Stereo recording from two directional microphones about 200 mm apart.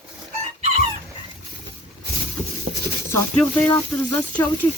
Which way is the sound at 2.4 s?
20° right (ahead or behind).